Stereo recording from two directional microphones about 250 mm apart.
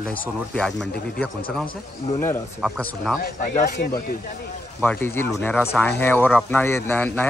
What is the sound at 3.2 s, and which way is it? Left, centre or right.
Speech, left.